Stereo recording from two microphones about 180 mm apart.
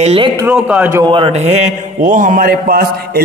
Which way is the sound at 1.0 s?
30° right (ahead or behind).